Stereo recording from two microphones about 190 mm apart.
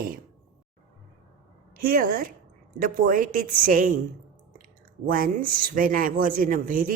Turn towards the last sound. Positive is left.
turn(degrees=-45)  # may be behind; listen again after turning